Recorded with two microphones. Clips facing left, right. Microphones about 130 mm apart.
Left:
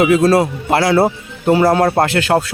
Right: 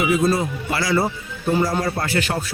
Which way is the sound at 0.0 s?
85° left.